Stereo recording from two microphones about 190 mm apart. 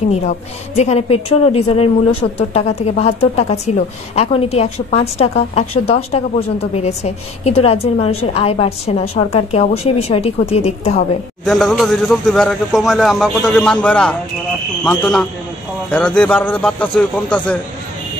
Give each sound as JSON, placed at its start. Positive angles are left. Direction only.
{"t": 0.1, "sound": "a woman's voice", "side_deg": 35}
{"t": 11.4, "sound": "a man's voice", "side_deg": 0}